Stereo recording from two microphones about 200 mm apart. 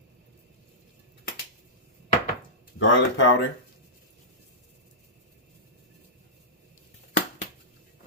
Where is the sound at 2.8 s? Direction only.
65° left (ahead or behind).